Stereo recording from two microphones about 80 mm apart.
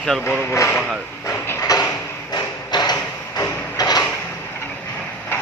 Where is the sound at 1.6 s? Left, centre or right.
Left.